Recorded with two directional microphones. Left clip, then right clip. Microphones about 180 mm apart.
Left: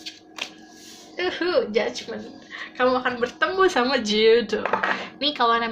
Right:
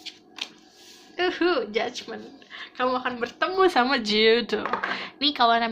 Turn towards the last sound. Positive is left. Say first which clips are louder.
# even
turn(degrees=-30)  # may be behind; listen again after turning